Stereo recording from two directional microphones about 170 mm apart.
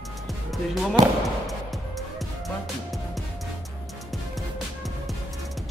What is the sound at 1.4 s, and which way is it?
Music, centre (ahead or behind).